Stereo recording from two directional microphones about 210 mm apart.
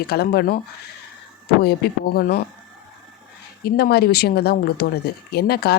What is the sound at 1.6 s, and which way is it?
Speech, 45° left (ahead or behind).